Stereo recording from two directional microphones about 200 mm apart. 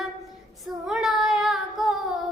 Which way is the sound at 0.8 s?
Centre (ahead or behind).